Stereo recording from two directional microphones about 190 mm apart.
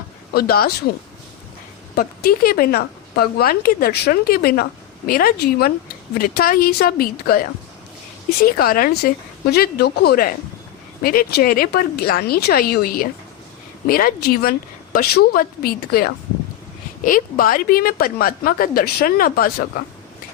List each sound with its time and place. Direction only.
0.3 s speech: 55° left (ahead or behind)
2.0 s speech: 50° left (ahead or behind)
8.5 s speech: 50° left (ahead or behind)